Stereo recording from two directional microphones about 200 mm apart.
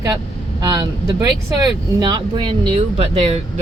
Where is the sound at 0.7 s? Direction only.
20° right (ahead or behind).